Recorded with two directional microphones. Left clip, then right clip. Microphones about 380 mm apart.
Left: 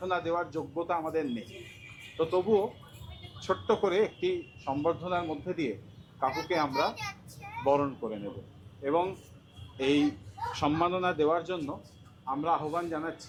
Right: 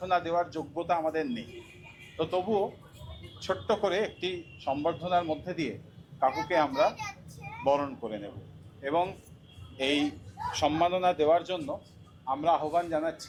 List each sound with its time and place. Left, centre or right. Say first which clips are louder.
0.0 s a man's voice: right 3 dB; centre